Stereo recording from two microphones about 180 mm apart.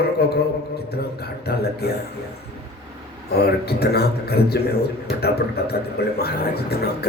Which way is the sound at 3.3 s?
60° left (ahead or behind).